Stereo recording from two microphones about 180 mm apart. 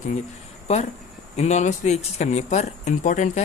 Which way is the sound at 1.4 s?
40° left (ahead or behind).